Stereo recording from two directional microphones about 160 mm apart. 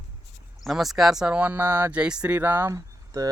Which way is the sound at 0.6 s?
Centre (ahead or behind).